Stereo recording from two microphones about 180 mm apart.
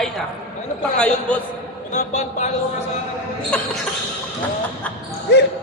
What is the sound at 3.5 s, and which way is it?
Speech, 5° left (ahead or behind).